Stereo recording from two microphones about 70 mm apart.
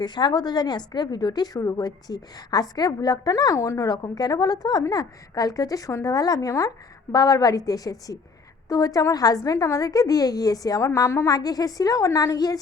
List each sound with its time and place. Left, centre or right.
0.0 s a woman's voice: left
3.8 s a woman's voice: left
11.3 s a woman's voice: left